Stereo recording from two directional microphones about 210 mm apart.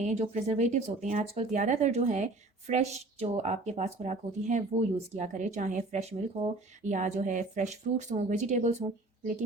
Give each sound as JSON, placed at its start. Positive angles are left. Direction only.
{"t": 0.0, "sound": "speech", "side_deg": -35}